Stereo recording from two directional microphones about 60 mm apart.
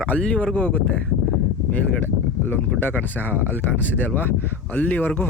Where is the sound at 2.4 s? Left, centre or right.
Left.